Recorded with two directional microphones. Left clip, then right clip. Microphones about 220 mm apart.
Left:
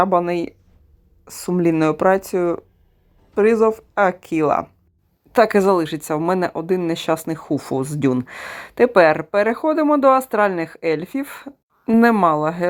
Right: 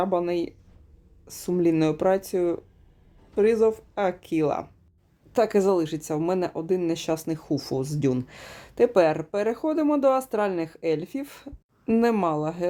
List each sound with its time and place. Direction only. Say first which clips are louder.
0.0 s speech: left 7 dB; 15° left (ahead or behind)